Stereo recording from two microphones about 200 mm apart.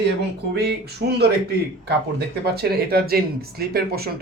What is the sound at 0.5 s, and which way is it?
Speech, 55° right (ahead or behind).